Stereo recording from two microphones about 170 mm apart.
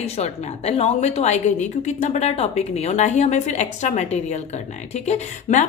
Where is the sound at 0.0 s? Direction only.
35° left (ahead or behind).